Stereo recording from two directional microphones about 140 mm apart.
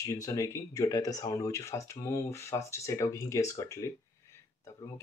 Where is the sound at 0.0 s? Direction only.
25° left (ahead or behind).